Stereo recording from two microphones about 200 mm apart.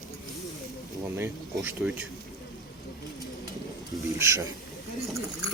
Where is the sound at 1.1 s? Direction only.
10° right (ahead or behind).